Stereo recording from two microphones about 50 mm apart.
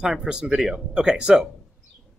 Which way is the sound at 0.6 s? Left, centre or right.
Centre.